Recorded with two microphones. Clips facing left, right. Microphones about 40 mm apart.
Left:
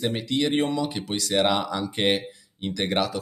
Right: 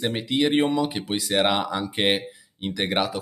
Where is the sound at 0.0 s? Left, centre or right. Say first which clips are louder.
Right 2 dB; centre.